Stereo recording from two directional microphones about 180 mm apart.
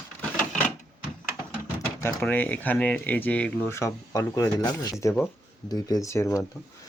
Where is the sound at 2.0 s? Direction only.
10° left (ahead or behind).